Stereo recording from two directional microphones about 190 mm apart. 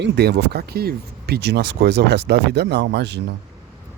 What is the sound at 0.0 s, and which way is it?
Speech, 60° right (ahead or behind).